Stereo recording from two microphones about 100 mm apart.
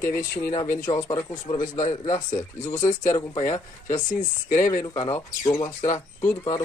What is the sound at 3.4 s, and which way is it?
Speech, 25° left (ahead or behind).